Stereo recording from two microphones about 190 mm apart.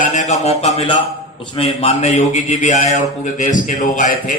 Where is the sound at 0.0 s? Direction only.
40° left (ahead or behind).